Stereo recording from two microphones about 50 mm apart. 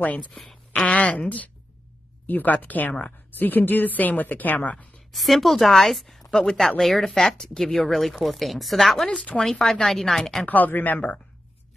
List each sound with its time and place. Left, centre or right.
0.0 s a woman's voice: left
0.3 s speech: centre
0.7 s a woman's voice: left
5.1 s speech: centre
10.4 s a woman's voice: left